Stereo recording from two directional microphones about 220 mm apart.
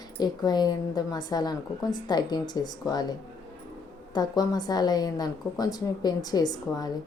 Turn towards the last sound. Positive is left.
turn(degrees=20)  # may be behind; listen again after turning